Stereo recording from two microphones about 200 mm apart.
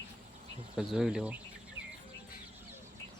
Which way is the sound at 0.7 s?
5° right (ahead or behind).